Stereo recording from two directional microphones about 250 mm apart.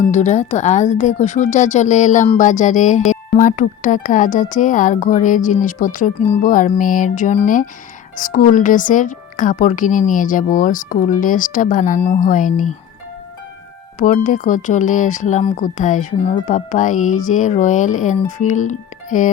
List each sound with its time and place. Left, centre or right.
0.1 s a woman's voice: left
14.0 s speech: left